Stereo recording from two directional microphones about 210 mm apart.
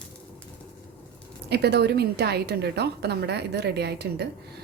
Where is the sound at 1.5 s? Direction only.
50° right (ahead or behind).